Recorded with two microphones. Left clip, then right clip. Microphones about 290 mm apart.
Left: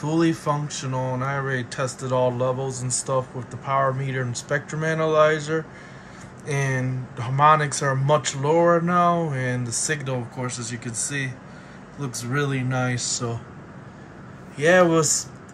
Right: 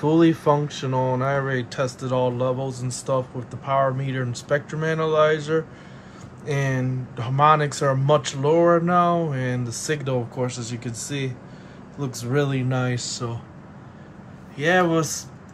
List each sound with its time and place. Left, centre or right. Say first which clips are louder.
0.0 s speech: right 4 dB; centre
14.6 s speech: left 3 dB; centre